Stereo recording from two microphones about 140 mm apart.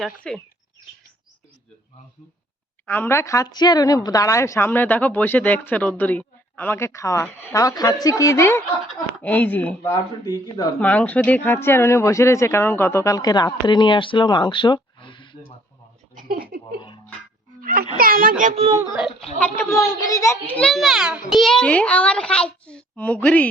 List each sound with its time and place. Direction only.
0.2 s speech: 5° left (ahead or behind)
2.8 s a child's voice: 15° left (ahead or behind)
9.9 s speech: 25° left (ahead or behind)
10.8 s speech: 10° left (ahead or behind); by 15.5 s 35° left (ahead or behind)
16.1 s a sound: 90° right
17.6 s speech: 90° right
19.4 s speech: 15° left (ahead or behind)
20.6 s a child's voice: 5° left (ahead or behind)